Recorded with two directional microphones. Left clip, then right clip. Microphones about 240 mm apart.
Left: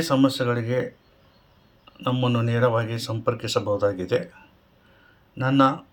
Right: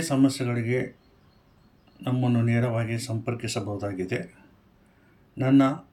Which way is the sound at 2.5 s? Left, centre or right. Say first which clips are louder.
Left 6 dB; left.